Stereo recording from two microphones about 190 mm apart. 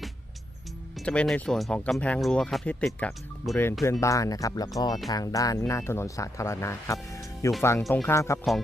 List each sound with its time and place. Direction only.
0.9 s speech: 5° left (ahead or behind)
3.5 s speech: 15° left (ahead or behind)